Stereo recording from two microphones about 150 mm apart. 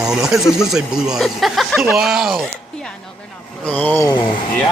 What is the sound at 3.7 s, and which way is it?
Speech, 10° left (ahead or behind).